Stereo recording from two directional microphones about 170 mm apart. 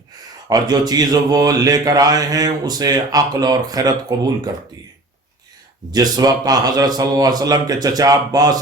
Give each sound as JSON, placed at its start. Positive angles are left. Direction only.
{"t": 0.4, "sound": "speech", "side_deg": -20}
{"t": 5.9, "sound": "speech", "side_deg": -25}